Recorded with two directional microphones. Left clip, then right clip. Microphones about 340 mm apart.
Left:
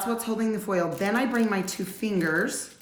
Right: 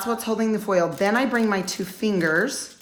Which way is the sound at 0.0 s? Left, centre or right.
Centre.